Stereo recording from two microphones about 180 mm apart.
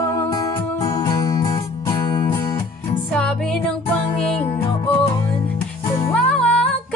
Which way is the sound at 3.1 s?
5° left (ahead or behind).